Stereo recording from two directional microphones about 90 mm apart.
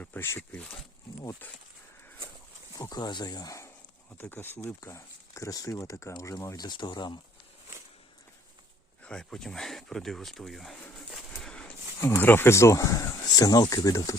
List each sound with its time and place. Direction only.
0.0 s speech: 25° left (ahead or behind)
2.9 s speech: 50° left (ahead or behind)
4.2 s speech: 25° left (ahead or behind)
6.7 s speech: 55° left (ahead or behind)
9.0 s speech: 5° left (ahead or behind)
11.9 s speech: 25° left (ahead or behind)